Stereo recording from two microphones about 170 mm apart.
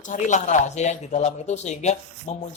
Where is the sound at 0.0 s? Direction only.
45° left (ahead or behind).